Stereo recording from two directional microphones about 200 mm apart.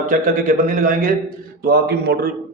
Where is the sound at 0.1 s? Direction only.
45° right (ahead or behind).